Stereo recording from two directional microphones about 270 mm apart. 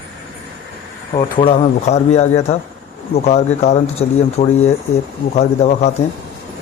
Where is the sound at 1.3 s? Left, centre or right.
Left.